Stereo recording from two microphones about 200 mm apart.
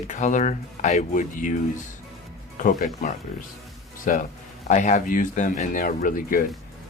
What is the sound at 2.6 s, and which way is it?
Speech, 40° left (ahead or behind).